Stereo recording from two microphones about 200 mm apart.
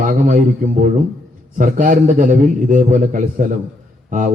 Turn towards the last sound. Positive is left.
turn(degrees=-40)  # may be behind; listen again after turning